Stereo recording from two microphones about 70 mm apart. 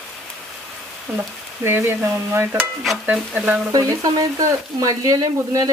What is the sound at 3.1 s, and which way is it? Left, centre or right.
Speech, centre.